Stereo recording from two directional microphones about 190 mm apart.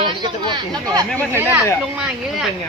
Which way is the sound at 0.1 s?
25° right (ahead or behind).